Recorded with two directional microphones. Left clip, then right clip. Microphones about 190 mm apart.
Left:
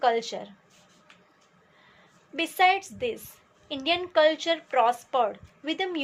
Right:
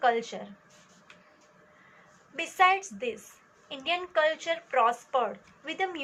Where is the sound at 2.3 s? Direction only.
50° left (ahead or behind).